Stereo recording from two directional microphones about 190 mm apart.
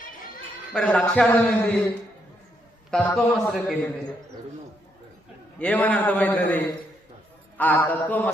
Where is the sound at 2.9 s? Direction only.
Centre (ahead or behind).